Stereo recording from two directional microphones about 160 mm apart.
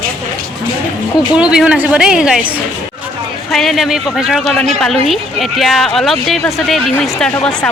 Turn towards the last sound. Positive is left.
turn(degrees=5)  # may be behind; listen again after turning